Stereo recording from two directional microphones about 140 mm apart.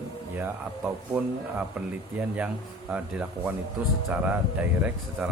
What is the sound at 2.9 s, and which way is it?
Speech, 10° right (ahead or behind).